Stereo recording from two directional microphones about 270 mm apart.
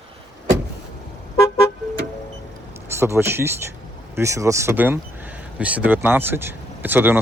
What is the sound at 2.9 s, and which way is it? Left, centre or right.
Speech, centre.